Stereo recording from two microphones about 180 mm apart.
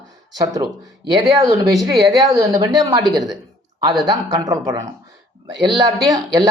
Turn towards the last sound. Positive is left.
turn(degrees=-20)  # may be behind; listen again after turning